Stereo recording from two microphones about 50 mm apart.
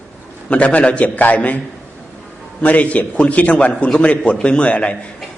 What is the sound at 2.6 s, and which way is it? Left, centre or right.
A man's voice, left.